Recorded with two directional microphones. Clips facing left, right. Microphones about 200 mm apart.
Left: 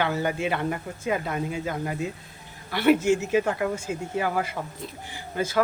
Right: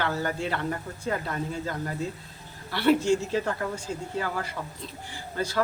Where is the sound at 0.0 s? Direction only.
15° left (ahead or behind).